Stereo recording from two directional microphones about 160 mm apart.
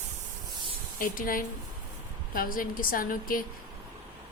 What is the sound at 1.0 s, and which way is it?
Speech, 60° left (ahead or behind).